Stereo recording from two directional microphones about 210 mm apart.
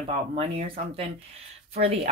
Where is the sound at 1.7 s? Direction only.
30° right (ahead or behind).